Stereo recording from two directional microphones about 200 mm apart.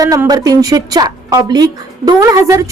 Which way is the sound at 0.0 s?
15° right (ahead or behind).